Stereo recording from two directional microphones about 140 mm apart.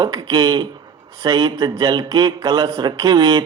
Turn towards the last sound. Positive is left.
turn(degrees=-30)  # may be behind; listen again after turning